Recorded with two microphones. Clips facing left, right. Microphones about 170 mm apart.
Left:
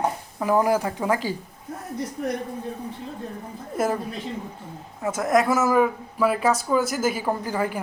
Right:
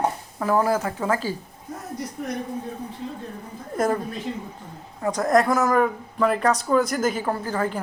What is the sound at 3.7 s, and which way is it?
Speech, 5° left (ahead or behind).